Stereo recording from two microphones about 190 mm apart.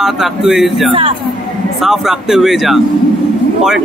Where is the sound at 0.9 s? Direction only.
30° right (ahead or behind).